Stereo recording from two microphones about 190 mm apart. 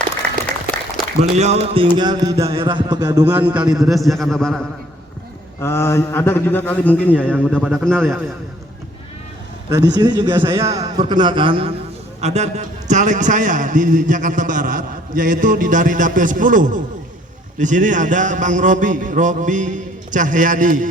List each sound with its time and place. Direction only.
1.2 s a man's voice: 35° right (ahead or behind); by 8.2 s 5° left (ahead or behind)
9.6 s a man's voice: 20° right (ahead or behind); by 20.8 s 45° right (ahead or behind)